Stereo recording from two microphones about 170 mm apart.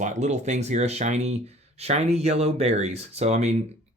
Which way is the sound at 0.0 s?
45° right (ahead or behind).